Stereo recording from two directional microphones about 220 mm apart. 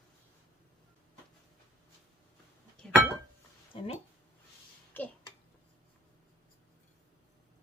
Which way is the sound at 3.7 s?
25° left (ahead or behind).